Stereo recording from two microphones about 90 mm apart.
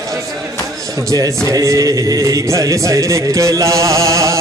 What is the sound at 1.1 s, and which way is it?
Music, 40° right (ahead or behind).